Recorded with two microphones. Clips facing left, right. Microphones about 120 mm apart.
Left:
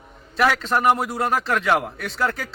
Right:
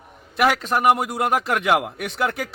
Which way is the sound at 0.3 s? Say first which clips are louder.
Even; 10° right (ahead or behind).